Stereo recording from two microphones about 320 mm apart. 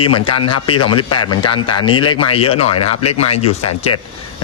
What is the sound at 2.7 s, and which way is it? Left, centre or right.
Speech, left.